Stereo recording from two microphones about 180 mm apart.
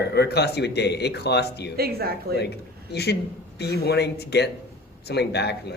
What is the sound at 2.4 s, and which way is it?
A man's voice, 65° left (ahead or behind).